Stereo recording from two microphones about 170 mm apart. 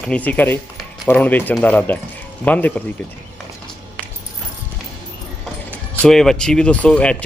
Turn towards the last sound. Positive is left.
turn(degrees=5)  # may be behind; listen again after turning